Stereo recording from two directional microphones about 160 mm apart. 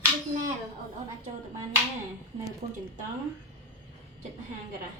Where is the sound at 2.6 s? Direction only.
50° right (ahead or behind).